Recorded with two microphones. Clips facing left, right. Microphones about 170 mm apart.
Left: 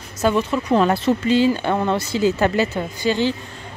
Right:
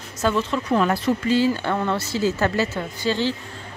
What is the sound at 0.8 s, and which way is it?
Speech, 30° left (ahead or behind).